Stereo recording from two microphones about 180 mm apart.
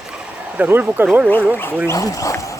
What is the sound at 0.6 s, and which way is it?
Speech, 10° right (ahead or behind).